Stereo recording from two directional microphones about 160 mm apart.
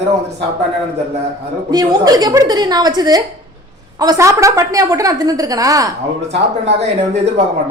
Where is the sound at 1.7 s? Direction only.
25° right (ahead or behind).